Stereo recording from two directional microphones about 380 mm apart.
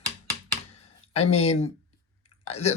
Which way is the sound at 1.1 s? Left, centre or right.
Centre.